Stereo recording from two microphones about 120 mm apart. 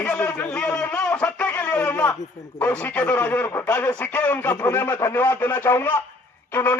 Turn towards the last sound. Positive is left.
turn(degrees=15)  # may be behind; listen again after turning